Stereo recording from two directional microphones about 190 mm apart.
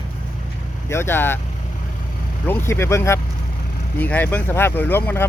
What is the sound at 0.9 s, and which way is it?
Speech, 10° left (ahead or behind).